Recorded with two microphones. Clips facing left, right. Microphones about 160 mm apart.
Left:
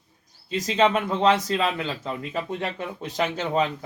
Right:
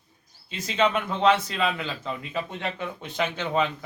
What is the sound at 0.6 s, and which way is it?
A man's voice, 40° left (ahead or behind).